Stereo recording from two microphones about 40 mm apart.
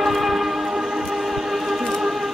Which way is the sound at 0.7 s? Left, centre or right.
Right.